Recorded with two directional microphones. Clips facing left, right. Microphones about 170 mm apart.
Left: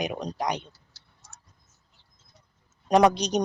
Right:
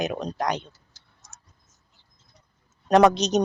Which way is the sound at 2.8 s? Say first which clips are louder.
Right 3 dB; 10° left (ahead or behind).